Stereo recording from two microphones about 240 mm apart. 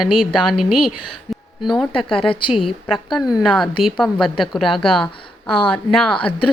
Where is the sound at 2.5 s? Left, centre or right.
Centre.